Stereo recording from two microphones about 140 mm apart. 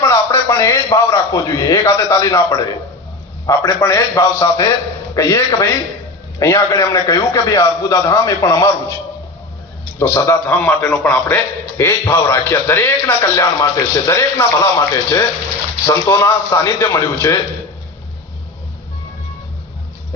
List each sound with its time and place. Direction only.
0.0 s a man's voice: 20° left (ahead or behind)
10.0 s a man's voice: 20° left (ahead or behind)